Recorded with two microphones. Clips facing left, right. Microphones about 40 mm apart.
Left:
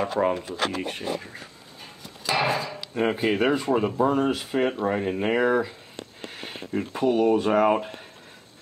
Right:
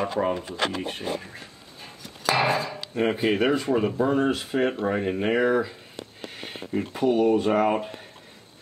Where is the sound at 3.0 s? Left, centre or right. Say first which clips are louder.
Even; centre.